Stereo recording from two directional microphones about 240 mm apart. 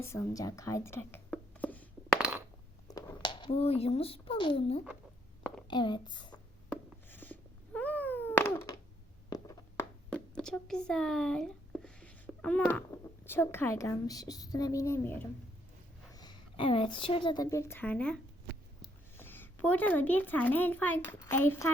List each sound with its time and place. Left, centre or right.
0.0 s a woman's voice: centre
1.3 s a sound: centre
2.8 s a sound: centre
5.6 s a woman's voice: centre
6.7 s cat: centre
9.3 s writing: centre
10.1 s a woman's voice: centre